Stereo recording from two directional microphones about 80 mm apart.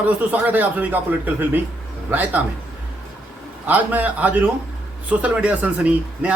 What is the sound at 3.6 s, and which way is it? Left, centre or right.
Speech, right.